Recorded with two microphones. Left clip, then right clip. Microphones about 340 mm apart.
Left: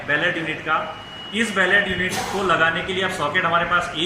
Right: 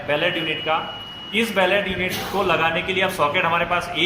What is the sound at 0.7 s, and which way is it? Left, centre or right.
Speech, centre.